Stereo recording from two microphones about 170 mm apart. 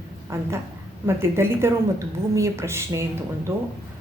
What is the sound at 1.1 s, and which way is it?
Speech, 15° right (ahead or behind).